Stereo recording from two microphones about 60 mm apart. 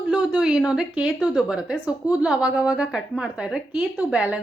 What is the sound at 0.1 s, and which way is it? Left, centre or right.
A woman's voice, centre.